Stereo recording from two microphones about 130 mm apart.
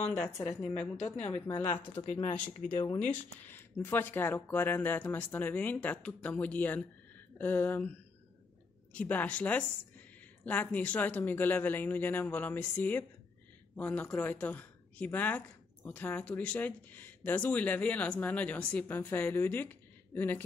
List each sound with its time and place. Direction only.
0.0 s a woman's voice: 10° left (ahead or behind)
2.0 s speech: 35° left (ahead or behind)
3.0 s a woman's voice: 15° left (ahead or behind)
8.9 s a woman's voice: 10° left (ahead or behind)